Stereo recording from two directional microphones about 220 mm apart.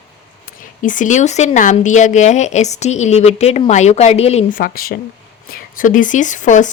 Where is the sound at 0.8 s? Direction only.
35° left (ahead or behind).